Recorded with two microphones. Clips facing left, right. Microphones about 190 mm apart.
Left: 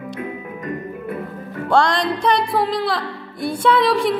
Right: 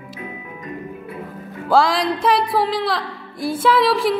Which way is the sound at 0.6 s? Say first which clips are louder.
Left 3 dB; 55° left (ahead or behind).